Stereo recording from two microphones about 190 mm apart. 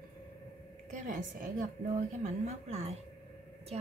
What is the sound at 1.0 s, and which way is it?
A woman's voice, 45° right (ahead or behind).